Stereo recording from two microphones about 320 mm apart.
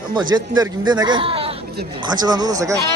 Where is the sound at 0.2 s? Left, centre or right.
Centre.